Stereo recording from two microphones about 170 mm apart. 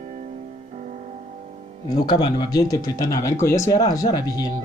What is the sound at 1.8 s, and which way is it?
Speech, 25° left (ahead or behind).